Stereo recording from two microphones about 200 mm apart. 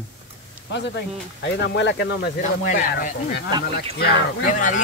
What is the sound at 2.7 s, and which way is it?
Speech, 40° left (ahead or behind).